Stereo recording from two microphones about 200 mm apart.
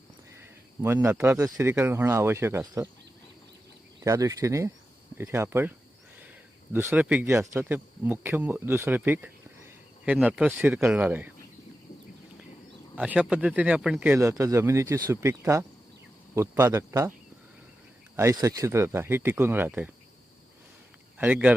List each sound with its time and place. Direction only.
0.3 s speech: 10° right (ahead or behind)
4.0 s speech: 15° right (ahead or behind)
6.7 s speech: 10° right (ahead or behind)
13.0 s speech: 5° right (ahead or behind)
18.2 s speech: 15° right (ahead or behind)
21.2 s speech: 5° right (ahead or behind)